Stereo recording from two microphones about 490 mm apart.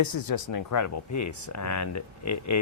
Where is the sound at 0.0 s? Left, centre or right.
Left.